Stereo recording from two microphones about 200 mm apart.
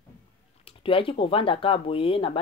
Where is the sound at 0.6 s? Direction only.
25° left (ahead or behind).